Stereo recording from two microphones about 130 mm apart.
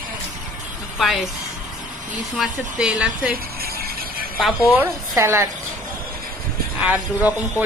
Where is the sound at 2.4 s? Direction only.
5° right (ahead or behind).